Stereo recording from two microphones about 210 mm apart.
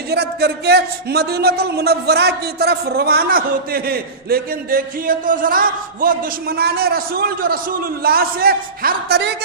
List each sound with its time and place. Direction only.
0.1 s speech: 50° right (ahead or behind)